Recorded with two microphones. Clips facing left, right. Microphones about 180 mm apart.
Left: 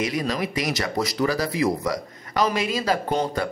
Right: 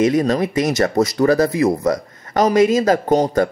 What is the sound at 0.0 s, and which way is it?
A man's voice, 50° right (ahead or behind).